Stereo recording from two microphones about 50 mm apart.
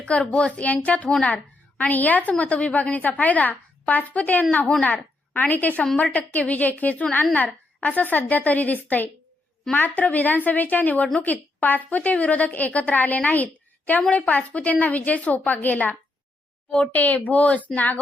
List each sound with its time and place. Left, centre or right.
0.0 s a child's voice: left